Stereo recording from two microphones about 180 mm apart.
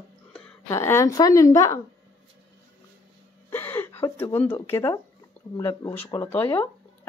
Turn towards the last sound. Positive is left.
turn(degrees=15)  # may be behind; listen again after turning